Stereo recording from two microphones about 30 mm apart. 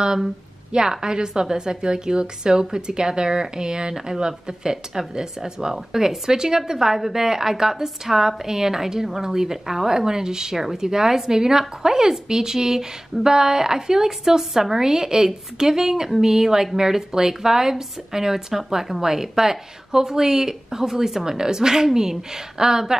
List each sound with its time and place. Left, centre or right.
0.7 s a woman's voice: right